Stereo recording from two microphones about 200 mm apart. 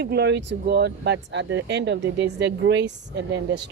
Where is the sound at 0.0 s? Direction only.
55° right (ahead or behind).